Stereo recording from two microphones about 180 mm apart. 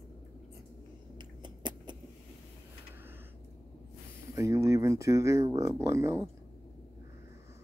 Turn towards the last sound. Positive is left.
turn(degrees=-15)  # may be behind; listen again after turning